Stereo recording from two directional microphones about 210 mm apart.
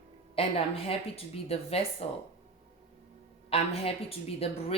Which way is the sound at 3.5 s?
30° left (ahead or behind).